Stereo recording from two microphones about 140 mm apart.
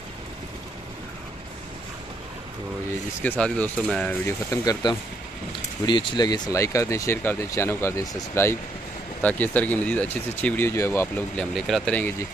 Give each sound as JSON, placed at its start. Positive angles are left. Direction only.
{"t": 3.2, "sound": "speech", "side_deg": 10}
{"t": 4.3, "sound": "speech", "side_deg": 25}
{"t": 11.3, "sound": "speech", "side_deg": 0}